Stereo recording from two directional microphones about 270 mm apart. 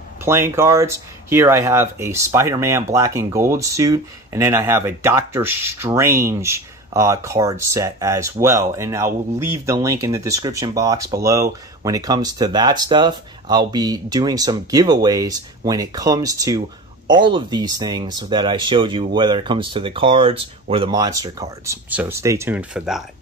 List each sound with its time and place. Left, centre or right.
0.2 s speech: centre